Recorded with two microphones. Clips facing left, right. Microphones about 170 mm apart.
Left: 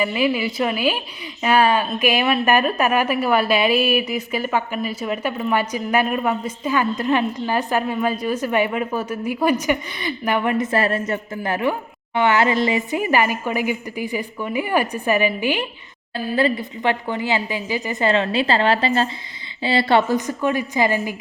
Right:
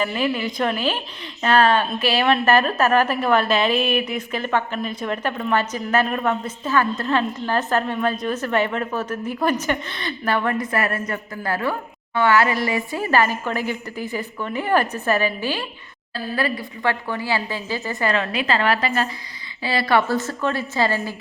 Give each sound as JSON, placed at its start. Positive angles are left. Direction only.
{"t": 0.0, "sound": "a woman's voice", "side_deg": 10}